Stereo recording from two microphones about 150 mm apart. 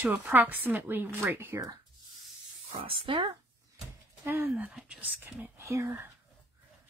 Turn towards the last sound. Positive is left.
turn(degrees=-15)  # may be behind; listen again after turning